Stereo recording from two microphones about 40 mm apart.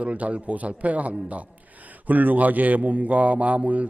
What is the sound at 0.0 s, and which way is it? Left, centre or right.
A man's voice, right.